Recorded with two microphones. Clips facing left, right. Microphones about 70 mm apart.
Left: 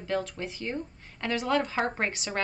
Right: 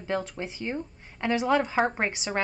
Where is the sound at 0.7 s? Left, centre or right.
Centre.